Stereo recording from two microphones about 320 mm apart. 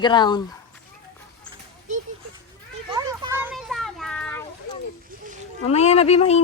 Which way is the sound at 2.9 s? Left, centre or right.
Centre.